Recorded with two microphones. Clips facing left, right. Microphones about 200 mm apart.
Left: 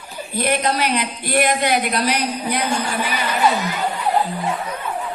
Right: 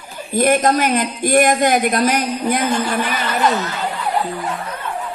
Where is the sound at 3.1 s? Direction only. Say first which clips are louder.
Left 2 dB; 10° left (ahead or behind).